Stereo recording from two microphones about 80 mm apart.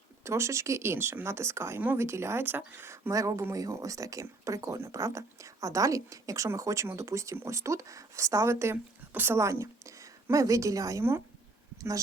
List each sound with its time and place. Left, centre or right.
0.3 s speech: right
3.1 s speech: right